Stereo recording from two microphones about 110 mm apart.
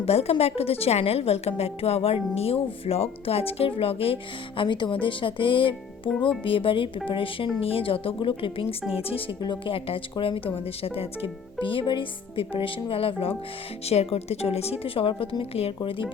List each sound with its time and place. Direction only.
0.0 s a woman's voice: 70° left (ahead or behind)
13.8 s a woman's voice: 70° left (ahead or behind)
15.8 s speech: 50° left (ahead or behind)